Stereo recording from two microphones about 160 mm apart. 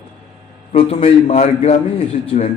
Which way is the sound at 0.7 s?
35° left (ahead or behind).